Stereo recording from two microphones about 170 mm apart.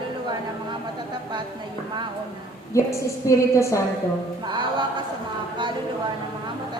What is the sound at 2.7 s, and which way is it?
A woman's voice, 15° left (ahead or behind).